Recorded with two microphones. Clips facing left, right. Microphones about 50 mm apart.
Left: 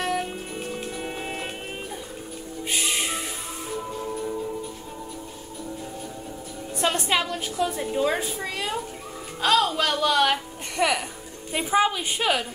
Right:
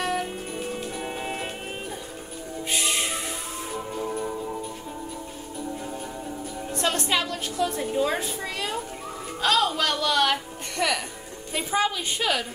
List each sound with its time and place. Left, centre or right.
0.0 s music: centre
2.7 s music: centre
6.8 s a woman's voice: centre